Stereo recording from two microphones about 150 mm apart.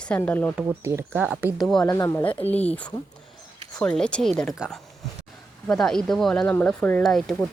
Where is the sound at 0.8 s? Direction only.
15° right (ahead or behind).